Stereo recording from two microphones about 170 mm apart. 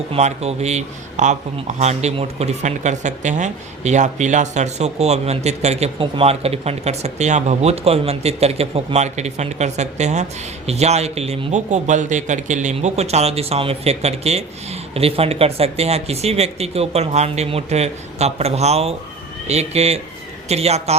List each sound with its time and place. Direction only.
0.1 s a man's voice: 40° right (ahead or behind)